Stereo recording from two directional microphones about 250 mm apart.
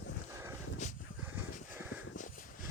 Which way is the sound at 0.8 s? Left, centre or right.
Left.